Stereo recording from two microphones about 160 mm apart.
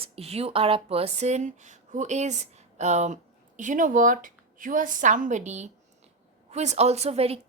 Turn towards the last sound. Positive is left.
turn(degrees=-40)  # may be behind; listen again after turning